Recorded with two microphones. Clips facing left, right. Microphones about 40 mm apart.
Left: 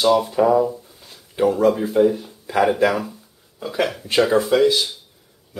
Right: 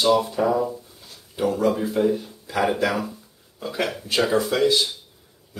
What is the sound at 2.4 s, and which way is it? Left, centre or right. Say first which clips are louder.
Speech: left 5 dB; centre.